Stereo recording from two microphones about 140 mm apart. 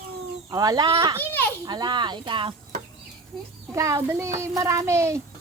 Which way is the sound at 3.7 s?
20° right (ahead or behind).